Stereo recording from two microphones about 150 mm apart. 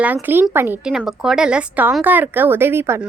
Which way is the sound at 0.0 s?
10° right (ahead or behind).